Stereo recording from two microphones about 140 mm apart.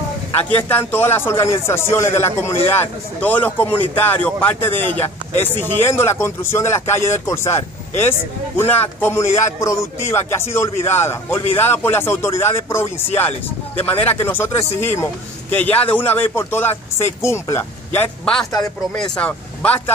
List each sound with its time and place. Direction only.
0.6 s a man's voice: 15° left (ahead or behind)
18.2 s a man's voice: 5° left (ahead or behind)